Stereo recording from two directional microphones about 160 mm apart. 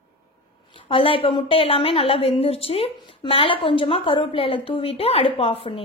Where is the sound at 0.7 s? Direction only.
35° left (ahead or behind).